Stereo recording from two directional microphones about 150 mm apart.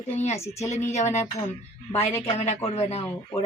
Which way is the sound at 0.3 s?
20° left (ahead or behind).